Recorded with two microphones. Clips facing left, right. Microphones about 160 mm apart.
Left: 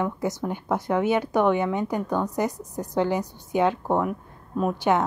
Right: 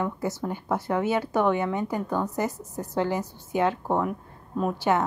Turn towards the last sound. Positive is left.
turn(degrees=15)  # may be behind; listen again after turning